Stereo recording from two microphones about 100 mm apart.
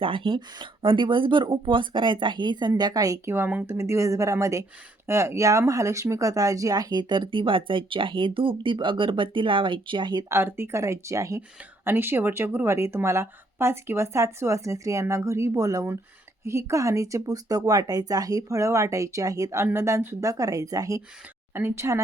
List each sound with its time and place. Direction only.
0.0 s speech: 60° right (ahead or behind); by 3.3 s 35° right (ahead or behind)
3.3 s speech: 15° right (ahead or behind)
3.7 s speech: 30° right (ahead or behind); by 10.2 s 50° right (ahead or behind)
10.2 s a woman's voice: 25° right (ahead or behind)